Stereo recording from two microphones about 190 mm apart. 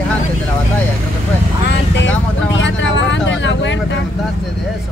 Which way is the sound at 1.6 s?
75° left (ahead or behind).